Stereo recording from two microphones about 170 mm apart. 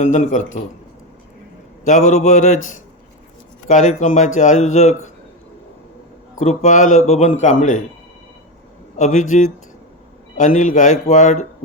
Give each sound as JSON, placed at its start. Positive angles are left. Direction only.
{"t": 0.0, "sound": "a man's voice", "side_deg": 45}
{"t": 1.8, "sound": "a man's voice", "side_deg": 45}
{"t": 3.7, "sound": "a man's voice", "side_deg": 45}
{"t": 6.4, "sound": "a man's voice", "side_deg": 40}
{"t": 9.0, "sound": "a man's voice", "side_deg": 45}